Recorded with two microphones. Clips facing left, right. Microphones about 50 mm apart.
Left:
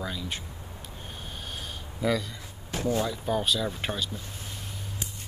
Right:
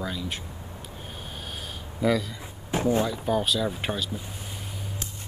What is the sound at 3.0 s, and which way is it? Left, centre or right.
Speech, centre.